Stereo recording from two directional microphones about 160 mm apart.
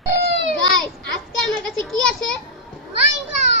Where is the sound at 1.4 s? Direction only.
Centre (ahead or behind).